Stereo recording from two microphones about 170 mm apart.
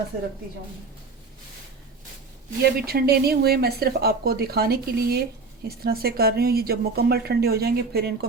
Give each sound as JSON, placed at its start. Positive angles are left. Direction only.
{"t": 2.6, "sound": "a woman's voice", "side_deg": -65}